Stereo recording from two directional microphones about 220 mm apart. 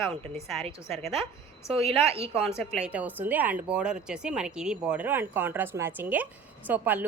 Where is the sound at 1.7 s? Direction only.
25° right (ahead or behind).